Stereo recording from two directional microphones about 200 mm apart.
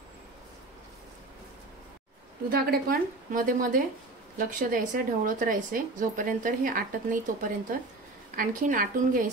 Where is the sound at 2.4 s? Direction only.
45° right (ahead or behind).